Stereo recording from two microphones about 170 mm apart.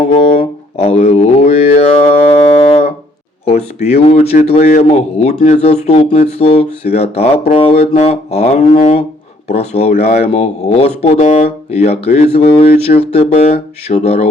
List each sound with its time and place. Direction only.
0.0 s music: 35° left (ahead or behind)
3.4 s a sound: 35° left (ahead or behind)
4.1 s speech: 40° left (ahead or behind)